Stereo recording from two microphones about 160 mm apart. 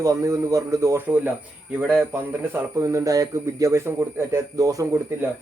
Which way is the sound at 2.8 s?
20° right (ahead or behind).